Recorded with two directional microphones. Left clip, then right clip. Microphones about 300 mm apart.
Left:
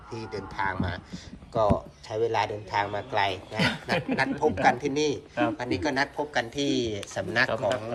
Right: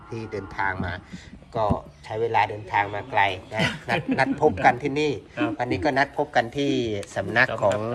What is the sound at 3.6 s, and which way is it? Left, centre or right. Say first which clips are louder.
Speech: right 1 dB; left.